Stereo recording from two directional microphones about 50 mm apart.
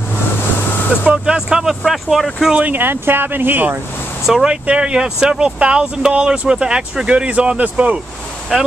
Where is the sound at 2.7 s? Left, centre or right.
Right.